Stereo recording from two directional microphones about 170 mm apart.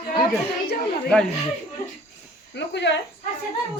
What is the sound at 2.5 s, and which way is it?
Speech, 90° left.